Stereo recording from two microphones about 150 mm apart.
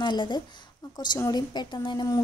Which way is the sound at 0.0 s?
30° left (ahead or behind).